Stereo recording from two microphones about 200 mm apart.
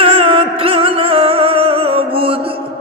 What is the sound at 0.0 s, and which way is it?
Music, 25° right (ahead or behind).